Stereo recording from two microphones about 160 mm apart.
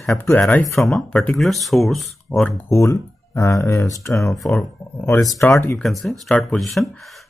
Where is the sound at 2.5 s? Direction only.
20° left (ahead or behind).